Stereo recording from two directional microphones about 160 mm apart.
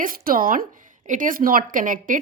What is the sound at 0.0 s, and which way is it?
Speech, 60° right (ahead or behind).